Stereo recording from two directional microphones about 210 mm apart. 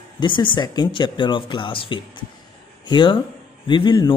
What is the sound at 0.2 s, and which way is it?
Speech, 20° left (ahead or behind).